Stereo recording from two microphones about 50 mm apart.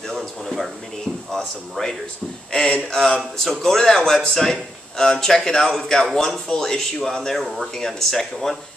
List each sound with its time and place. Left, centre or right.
1.3 s a man's voice: centre
2.5 s a man's voice: left
2.9 s a man's voice: centre